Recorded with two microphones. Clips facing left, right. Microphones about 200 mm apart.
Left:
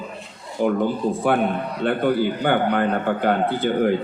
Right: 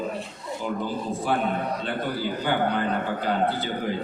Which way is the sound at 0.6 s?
60° left (ahead or behind).